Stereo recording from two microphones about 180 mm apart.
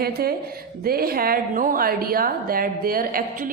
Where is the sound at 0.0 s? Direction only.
60° right (ahead or behind).